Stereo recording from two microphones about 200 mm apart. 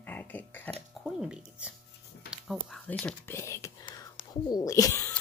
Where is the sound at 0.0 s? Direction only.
10° left (ahead or behind).